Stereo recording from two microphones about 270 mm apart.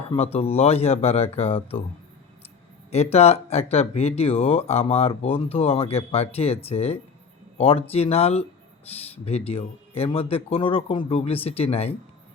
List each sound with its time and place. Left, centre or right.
0.1 s speech: left
2.9 s speech: left